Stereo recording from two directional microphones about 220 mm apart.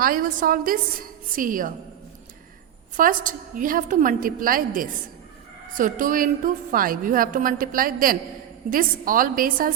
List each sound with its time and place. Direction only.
0.0 s a woman's voice: 40° right (ahead or behind)
2.9 s a woman's voice: 40° right (ahead or behind)